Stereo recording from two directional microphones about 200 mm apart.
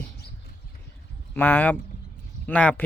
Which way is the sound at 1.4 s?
10° left (ahead or behind).